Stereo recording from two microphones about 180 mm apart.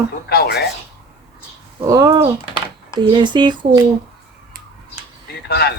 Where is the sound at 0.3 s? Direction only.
55° left (ahead or behind).